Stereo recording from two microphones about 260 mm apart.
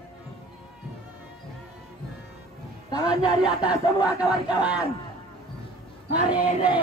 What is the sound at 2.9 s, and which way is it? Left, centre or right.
Speech, centre.